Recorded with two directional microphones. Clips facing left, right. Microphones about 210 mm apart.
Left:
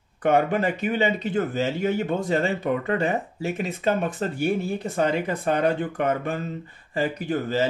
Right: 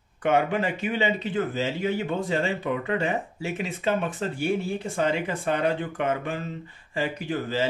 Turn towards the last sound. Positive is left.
turn(degrees=45)  # may be behind; listen again after turning